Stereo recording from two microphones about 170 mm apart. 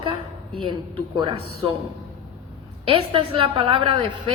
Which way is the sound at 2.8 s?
30° right (ahead or behind).